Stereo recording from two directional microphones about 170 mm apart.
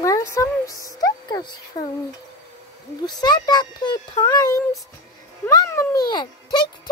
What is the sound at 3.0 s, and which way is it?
A child's voice, 25° left (ahead or behind).